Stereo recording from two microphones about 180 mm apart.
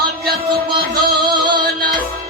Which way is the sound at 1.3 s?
25° right (ahead or behind).